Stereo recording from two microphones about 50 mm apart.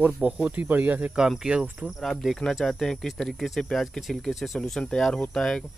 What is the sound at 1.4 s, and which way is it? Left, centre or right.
Speech, centre.